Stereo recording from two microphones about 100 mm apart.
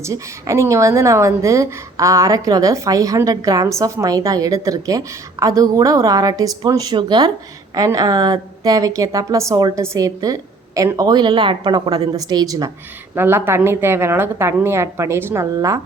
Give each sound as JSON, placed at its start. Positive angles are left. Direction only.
{"t": 0.0, "sound": "a woman's voice", "side_deg": -30}
{"t": 13.1, "sound": "a woman's voice", "side_deg": -25}